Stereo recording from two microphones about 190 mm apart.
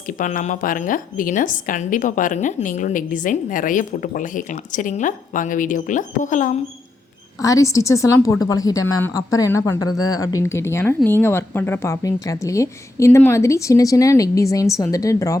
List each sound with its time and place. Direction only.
0.1 s a woman's voice: 45° left (ahead or behind)
7.3 s speech: 15° left (ahead or behind)